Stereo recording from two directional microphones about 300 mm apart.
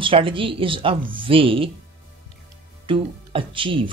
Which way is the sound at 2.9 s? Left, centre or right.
Centre.